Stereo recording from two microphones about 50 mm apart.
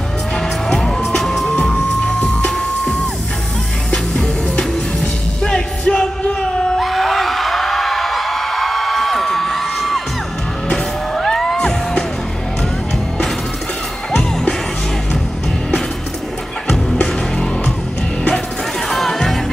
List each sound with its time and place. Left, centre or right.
0.4 s music: centre
3.9 s music: centre
6.8 s whoop: centre
10.7 s music: centre
16.7 s music: centre
18.9 s music: centre